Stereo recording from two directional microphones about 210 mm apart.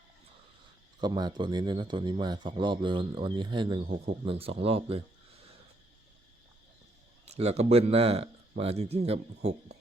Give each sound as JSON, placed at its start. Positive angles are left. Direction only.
{"t": 1.0, "sound": "speech", "side_deg": -20}
{"t": 7.3, "sound": "speech", "side_deg": -30}